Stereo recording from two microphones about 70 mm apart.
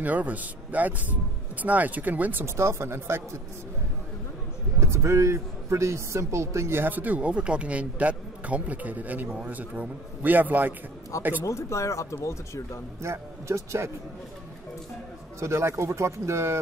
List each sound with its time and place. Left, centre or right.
0.0 s a man's voice: right
2.4 s speech: right
4.7 s a man's voice: right
11.4 s speech: left
13.0 s speech: right
15.4 s speech: right